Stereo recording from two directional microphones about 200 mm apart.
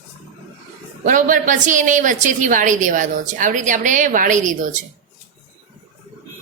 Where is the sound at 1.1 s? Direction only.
40° right (ahead or behind).